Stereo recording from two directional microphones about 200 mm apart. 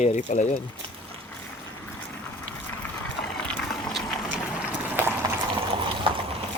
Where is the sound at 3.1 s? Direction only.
5° left (ahead or behind).